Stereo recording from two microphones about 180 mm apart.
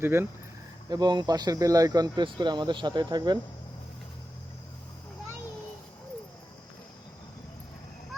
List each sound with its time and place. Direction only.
0.0 s speech: 15° right (ahead or behind)